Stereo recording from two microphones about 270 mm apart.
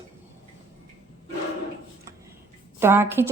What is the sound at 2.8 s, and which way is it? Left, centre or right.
Speech, centre.